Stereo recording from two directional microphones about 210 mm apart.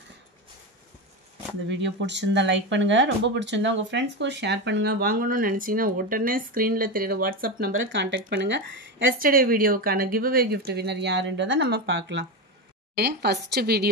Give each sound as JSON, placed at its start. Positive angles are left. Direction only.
{"t": 1.7, "sound": "speech", "side_deg": -60}
{"t": 7.6, "sound": "speech", "side_deg": -65}
{"t": 9.2, "sound": "speech", "side_deg": -45}